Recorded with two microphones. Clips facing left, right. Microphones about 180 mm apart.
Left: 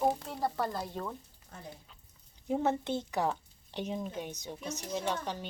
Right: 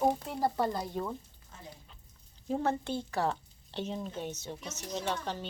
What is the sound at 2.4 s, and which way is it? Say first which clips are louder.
Speech: left 1 dB; 15° left (ahead or behind).